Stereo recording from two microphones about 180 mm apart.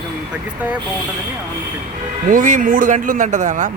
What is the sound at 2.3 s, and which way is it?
A man's voice, 45° right (ahead or behind).